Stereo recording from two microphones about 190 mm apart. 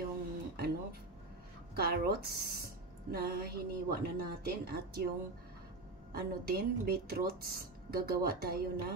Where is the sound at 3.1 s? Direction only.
50° right (ahead or behind).